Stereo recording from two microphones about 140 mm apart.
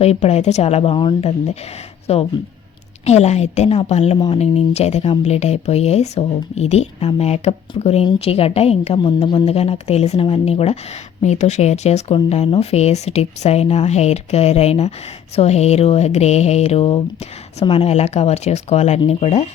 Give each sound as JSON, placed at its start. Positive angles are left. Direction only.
{"t": 0.0, "sound": "speech", "side_deg": 50}